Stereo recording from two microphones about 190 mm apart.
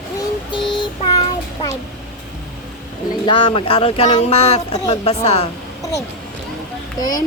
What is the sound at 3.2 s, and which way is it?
Speech, 25° left (ahead or behind).